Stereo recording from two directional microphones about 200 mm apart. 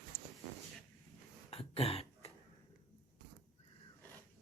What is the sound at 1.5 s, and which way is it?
Throat clearing, 30° left (ahead or behind).